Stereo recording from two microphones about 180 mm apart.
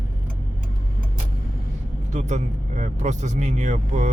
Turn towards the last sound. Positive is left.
turn(degrees=-40)  # may be behind; listen again after turning